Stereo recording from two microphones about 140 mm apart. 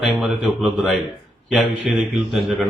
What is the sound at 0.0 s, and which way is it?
Speech, 5° right (ahead or behind).